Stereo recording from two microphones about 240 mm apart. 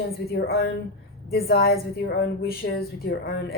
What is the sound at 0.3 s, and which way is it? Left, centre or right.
A woman's voice, left.